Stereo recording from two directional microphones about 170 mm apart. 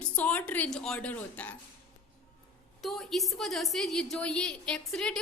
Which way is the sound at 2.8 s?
Centre (ahead or behind).